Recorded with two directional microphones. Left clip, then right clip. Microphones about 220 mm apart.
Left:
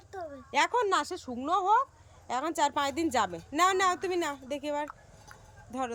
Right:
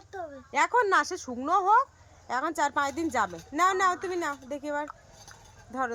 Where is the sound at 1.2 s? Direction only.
5° right (ahead or behind).